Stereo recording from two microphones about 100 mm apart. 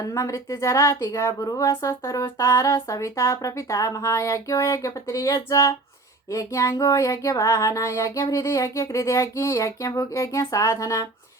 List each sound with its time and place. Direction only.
0.0 s female singing: 35° left (ahead or behind)